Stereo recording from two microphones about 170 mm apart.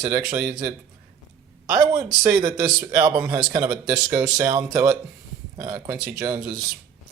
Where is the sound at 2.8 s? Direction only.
25° right (ahead or behind).